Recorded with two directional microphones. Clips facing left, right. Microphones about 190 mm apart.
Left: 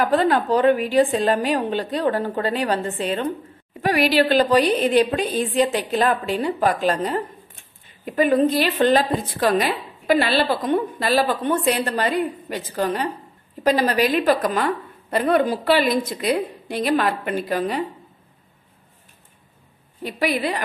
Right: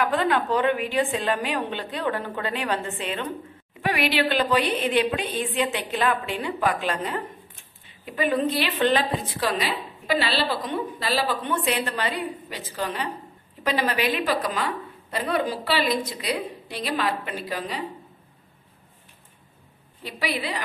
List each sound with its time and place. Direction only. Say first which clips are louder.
0.0 s a woman's voice: left 4 dB; 40° left (ahead or behind)
20.0 s a woman's voice: left 7 dB; 50° left (ahead or behind)